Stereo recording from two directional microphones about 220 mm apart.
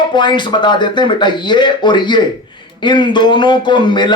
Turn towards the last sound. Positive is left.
turn(degrees=20)  # may be behind; listen again after turning